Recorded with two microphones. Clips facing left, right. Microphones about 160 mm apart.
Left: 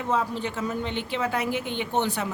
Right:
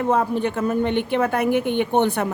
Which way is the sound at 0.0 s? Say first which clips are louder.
Right 7 dB; 55° right (ahead or behind).